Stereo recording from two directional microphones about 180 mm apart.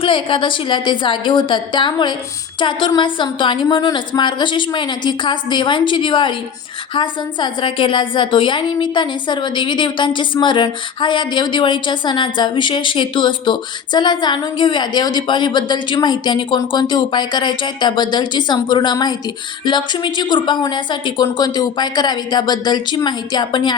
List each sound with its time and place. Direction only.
0.0 s a woman's voice: 30° left (ahead or behind)